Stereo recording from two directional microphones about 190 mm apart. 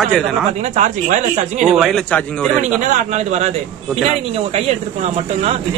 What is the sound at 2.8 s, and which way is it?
Speech, 40° right (ahead or behind).